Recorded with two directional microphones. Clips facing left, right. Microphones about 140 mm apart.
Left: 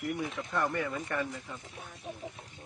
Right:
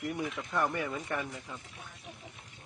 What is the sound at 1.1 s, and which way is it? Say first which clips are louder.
Speech: left 2 dB; 15° right (ahead or behind).